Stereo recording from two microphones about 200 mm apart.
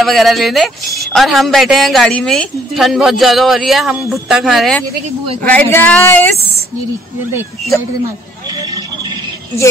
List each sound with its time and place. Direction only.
0.0 s speech: centre (ahead or behind)
8.5 s vehicle: 20° right (ahead or behind)